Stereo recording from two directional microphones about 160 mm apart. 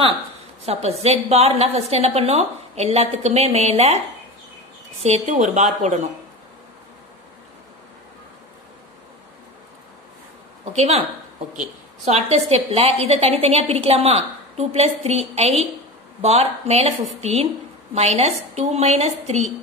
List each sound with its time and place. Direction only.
0.7 s a woman's voice: 40° right (ahead or behind)
5.0 s speech: 45° right (ahead or behind)
10.6 s a woman's voice: 45° right (ahead or behind)